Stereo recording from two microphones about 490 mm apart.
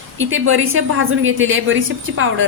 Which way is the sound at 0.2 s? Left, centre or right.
Right.